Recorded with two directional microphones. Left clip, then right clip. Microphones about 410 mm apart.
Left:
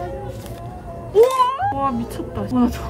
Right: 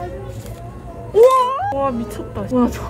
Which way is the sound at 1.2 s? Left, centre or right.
Centre.